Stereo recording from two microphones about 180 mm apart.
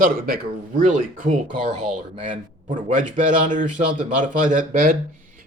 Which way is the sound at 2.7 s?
45° right (ahead or behind).